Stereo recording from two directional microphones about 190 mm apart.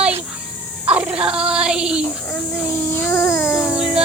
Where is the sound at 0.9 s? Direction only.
5° right (ahead or behind).